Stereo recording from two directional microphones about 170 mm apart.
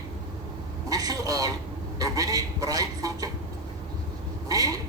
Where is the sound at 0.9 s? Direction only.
20° right (ahead or behind).